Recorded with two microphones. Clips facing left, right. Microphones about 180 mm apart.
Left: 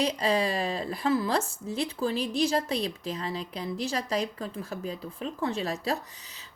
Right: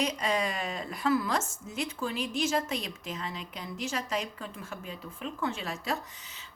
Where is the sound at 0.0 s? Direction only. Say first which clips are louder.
Left 4 dB; 30° left (ahead or behind).